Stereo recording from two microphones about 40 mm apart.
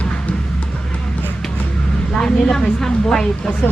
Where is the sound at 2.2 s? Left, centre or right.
Centre.